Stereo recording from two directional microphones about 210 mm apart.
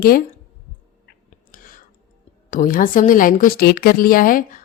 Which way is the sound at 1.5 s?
40° left (ahead or behind).